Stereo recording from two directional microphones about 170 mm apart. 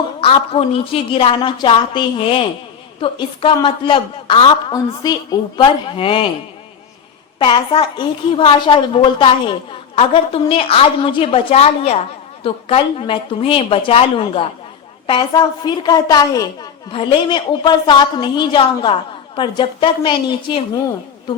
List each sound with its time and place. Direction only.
0.2 s a woman's voice: 35° left (ahead or behind)
7.3 s a woman's voice: 30° left (ahead or behind)